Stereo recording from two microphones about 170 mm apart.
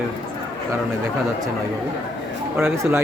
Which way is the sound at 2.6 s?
15° right (ahead or behind).